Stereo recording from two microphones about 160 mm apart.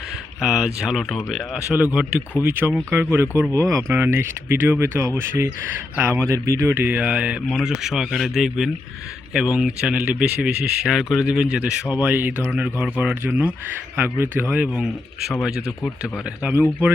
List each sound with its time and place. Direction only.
0.4 s speech: 5° right (ahead or behind)